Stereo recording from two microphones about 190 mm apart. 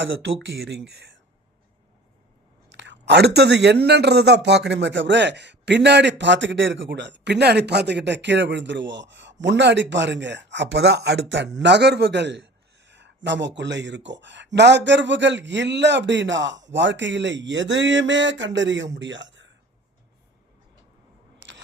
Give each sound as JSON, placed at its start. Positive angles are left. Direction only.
{"t": 0.0, "sound": "speech", "side_deg": -85}
{"t": 2.7, "sound": "speech", "side_deg": -65}
{"t": 12.8, "sound": "a sound", "side_deg": -70}
{"t": 13.6, "sound": "speech", "side_deg": -70}
{"t": 21.3, "sound": "single-lens reflex camera", "side_deg": -70}